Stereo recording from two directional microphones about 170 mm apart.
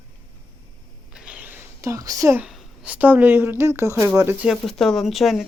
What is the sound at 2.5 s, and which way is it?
Speech, 5° right (ahead or behind).